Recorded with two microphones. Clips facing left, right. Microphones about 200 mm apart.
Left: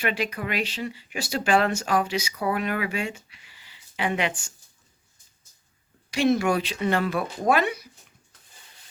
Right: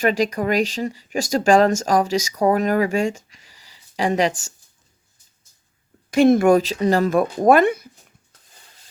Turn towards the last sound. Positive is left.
turn(degrees=-50)  # may be behind; listen again after turning